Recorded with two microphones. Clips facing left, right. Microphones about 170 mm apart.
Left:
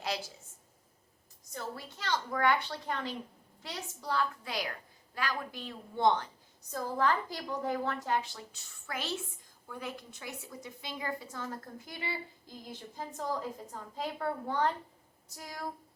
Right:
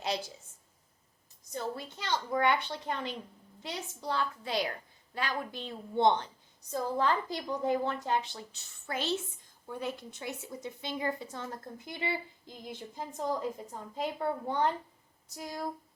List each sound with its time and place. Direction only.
1.5 s a woman's voice: 20° right (ahead or behind)